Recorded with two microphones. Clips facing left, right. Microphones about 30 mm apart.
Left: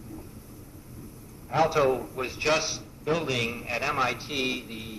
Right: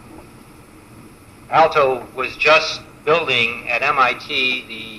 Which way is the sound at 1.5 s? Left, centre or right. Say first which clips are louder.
Right 9 dB; right.